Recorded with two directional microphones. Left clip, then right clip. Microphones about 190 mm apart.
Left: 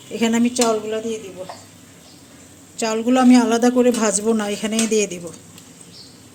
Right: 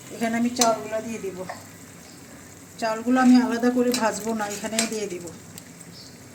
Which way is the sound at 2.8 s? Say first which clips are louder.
Left 4 dB; 60° left (ahead or behind).